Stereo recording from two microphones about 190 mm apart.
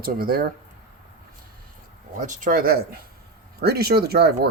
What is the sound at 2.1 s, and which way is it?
Speech, 45° right (ahead or behind).